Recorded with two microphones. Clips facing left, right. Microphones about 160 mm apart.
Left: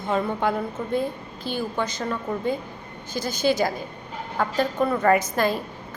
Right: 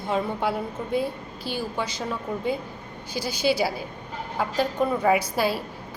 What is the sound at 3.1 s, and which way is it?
Speech, 50° left (ahead or behind).